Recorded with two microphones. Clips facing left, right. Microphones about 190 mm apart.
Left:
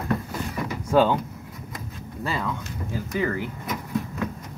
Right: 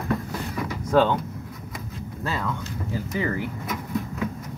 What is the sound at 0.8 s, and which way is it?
Speech, 5° left (ahead or behind).